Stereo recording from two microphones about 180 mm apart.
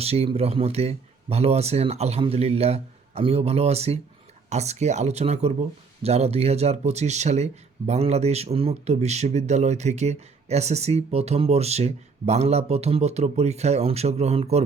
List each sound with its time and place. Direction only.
0.0 s speech: 35° right (ahead or behind)